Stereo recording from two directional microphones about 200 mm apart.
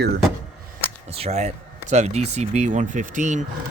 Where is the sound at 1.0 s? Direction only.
30° right (ahead or behind).